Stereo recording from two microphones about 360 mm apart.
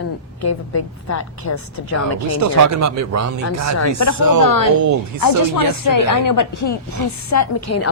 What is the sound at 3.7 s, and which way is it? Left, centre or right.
Speech, left.